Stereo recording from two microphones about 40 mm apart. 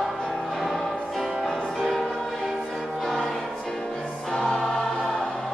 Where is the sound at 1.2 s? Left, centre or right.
Centre.